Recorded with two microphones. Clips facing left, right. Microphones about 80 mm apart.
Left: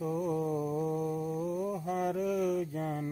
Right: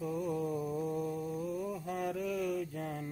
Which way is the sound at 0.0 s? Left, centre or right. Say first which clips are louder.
Left 3 dB; centre.